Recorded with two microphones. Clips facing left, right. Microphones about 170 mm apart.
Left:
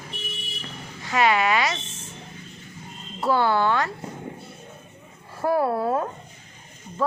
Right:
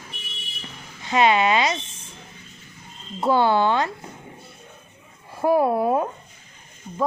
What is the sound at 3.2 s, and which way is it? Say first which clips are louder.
Speech: right 2 dB; 20° right (ahead or behind).